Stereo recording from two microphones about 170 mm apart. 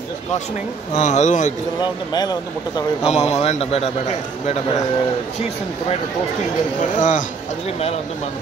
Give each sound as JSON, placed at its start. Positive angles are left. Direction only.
{"t": 0.9, "sound": "speech", "side_deg": 45}
{"t": 1.8, "sound": "speech", "side_deg": 25}
{"t": 3.1, "sound": "a man's voice", "side_deg": 40}
{"t": 7.0, "sound": "speech", "side_deg": 50}